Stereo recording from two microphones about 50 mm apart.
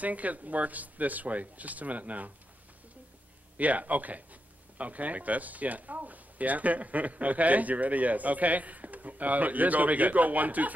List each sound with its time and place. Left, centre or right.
0.0 s speech: right
3.5 s speech: right